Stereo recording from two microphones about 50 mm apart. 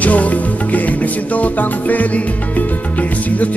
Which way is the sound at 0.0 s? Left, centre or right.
Left.